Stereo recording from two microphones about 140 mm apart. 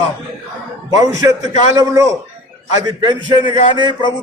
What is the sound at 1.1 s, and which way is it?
A man's voice, 25° right (ahead or behind).